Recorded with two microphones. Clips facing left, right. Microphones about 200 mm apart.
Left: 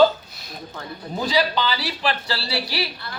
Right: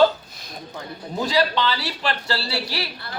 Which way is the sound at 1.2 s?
Centre (ahead or behind).